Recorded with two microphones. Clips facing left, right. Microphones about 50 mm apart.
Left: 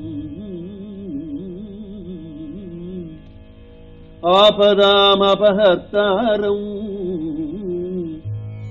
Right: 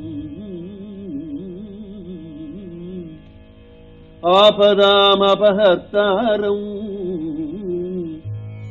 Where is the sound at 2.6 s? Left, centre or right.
Centre.